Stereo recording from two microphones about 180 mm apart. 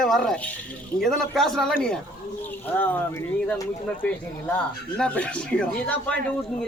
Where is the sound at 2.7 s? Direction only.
10° left (ahead or behind).